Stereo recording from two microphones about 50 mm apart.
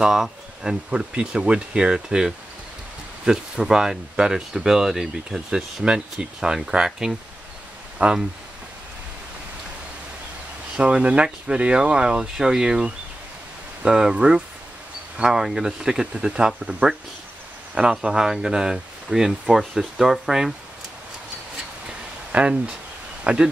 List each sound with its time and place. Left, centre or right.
0.0 s speech: centre
0.8 s speech: centre
8.0 s speech: right
10.8 s speech: right; by 20.5 s centre
22.3 s speech: right